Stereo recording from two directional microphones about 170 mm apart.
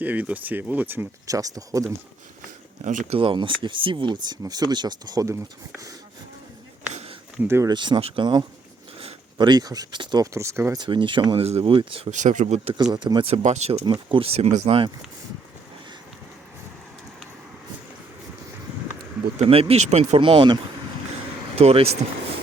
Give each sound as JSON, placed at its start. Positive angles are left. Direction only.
{"t": 0.0, "sound": "speech", "side_deg": -10}
{"t": 3.1, "sound": "speech", "side_deg": -30}
{"t": 6.9, "sound": "a sound", "side_deg": -35}
{"t": 7.4, "sound": "speech", "side_deg": -15}
{"t": 10.8, "sound": "speech", "side_deg": -30}
{"t": 12.1, "sound": "speech", "side_deg": -45}
{"t": 12.7, "sound": "speech", "side_deg": -25}
{"t": 19.4, "sound": "speech", "side_deg": -35}